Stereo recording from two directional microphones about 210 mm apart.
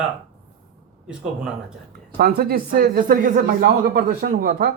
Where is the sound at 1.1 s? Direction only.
5° right (ahead or behind).